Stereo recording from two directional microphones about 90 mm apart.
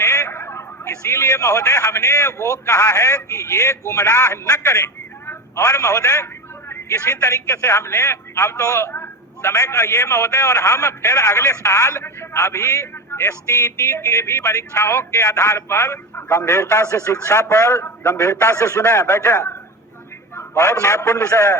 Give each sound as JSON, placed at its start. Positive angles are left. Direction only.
{"t": 0.0, "sound": "a man's voice", "side_deg": 30}
{"t": 5.6, "sound": "a man's voice", "side_deg": 35}